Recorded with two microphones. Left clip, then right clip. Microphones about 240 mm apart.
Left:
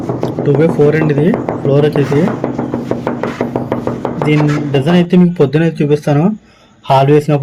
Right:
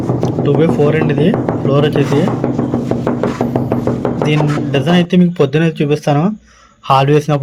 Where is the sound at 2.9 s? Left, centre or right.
Centre.